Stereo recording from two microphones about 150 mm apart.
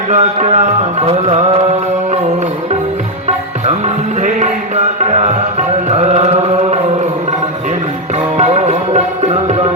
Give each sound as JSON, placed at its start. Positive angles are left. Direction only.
{"t": 0.1, "sound": "music", "side_deg": -55}
{"t": 5.1, "sound": "music", "side_deg": -50}
{"t": 8.4, "sound": "music", "side_deg": -50}